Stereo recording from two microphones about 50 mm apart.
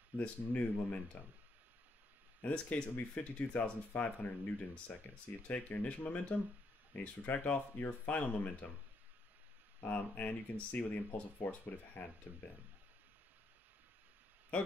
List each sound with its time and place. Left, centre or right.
0.1 s speech: right
0.5 s speech: left
2.4 s speech: left
9.8 s speech: left
14.5 s speech: left